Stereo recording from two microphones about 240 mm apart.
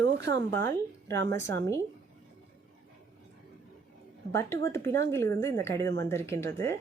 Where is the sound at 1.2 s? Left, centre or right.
Right.